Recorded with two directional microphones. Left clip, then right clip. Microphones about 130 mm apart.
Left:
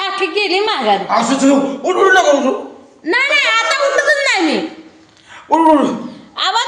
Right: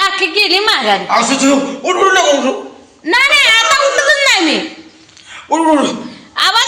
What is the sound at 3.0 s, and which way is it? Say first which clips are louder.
Speech: right 4 dB; 5° left (ahead or behind).